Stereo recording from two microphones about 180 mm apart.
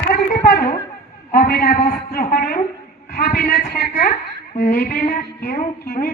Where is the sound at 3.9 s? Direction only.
40° left (ahead or behind).